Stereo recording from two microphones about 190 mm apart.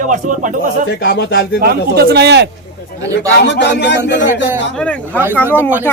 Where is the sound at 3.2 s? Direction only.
65° left (ahead or behind).